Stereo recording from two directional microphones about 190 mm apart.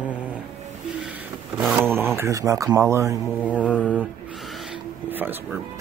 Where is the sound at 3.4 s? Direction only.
5° left (ahead or behind).